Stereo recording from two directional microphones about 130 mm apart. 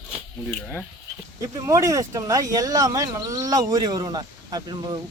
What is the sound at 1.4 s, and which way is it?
Speech, 25° right (ahead or behind).